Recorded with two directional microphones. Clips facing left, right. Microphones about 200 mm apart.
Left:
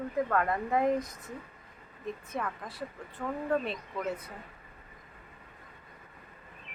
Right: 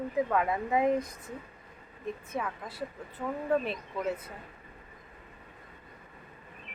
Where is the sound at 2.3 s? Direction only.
5° right (ahead or behind).